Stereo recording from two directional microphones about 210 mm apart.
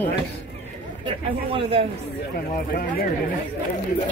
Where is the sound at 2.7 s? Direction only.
45° left (ahead or behind).